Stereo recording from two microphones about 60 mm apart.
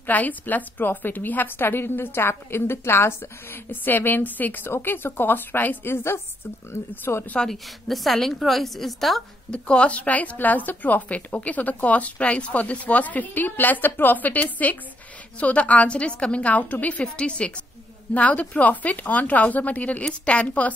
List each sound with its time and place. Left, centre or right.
0.0 s a woman's voice: left
3.8 s a woman's voice: left
7.4 s a woman's voice: centre
9.5 s speech: centre